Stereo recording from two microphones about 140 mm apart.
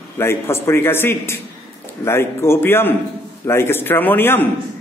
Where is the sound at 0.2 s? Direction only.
20° left (ahead or behind).